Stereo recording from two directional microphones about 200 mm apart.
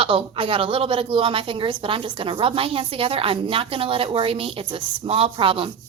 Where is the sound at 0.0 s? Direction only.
25° right (ahead or behind).